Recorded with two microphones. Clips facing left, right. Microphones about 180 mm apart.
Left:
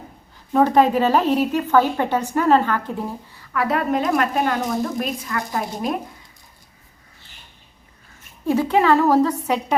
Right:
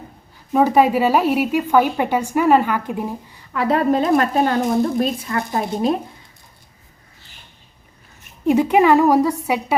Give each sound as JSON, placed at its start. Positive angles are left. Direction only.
{"t": 0.5, "sound": "a woman's voice", "side_deg": -10}
{"t": 3.5, "sound": "a woman's voice", "side_deg": -25}
{"t": 8.4, "sound": "a woman's voice", "side_deg": -15}